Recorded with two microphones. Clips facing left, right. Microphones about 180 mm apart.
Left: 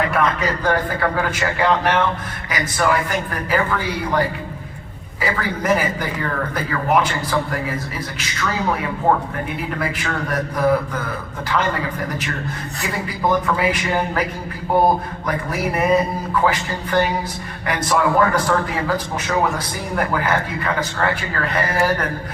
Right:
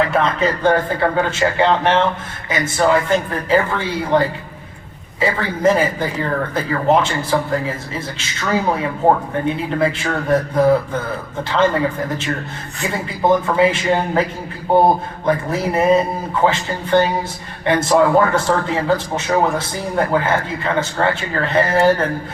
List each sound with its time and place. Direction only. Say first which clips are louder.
0.1 s a man's voice: right 2 dB; 25° right (ahead or behind)